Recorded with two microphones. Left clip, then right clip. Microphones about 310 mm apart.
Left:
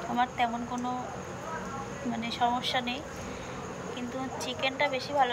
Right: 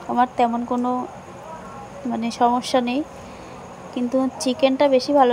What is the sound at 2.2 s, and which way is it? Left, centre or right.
Speech, centre.